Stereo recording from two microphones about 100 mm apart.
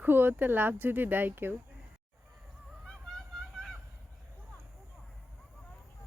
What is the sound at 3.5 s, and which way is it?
Fowl, centre (ahead or behind).